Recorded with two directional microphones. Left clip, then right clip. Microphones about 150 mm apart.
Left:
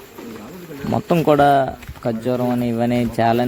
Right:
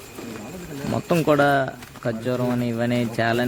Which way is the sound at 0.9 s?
15° left (ahead or behind).